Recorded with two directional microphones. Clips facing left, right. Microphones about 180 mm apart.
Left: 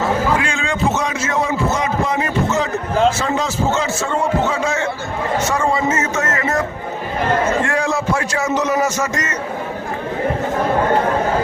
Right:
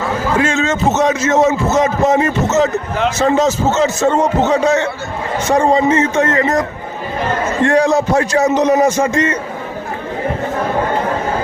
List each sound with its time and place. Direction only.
0.3 s a man's voice: 40° right (ahead or behind)